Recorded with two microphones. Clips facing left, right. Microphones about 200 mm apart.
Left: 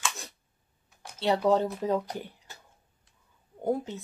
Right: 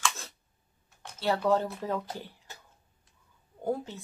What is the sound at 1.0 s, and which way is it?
Speech, 20° left (ahead or behind).